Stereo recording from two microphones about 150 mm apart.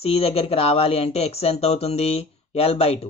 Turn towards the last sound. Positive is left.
turn(degrees=45)  # may be behind; listen again after turning